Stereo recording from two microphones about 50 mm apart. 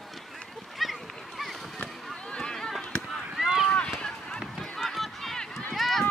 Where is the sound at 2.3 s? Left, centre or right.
Centre.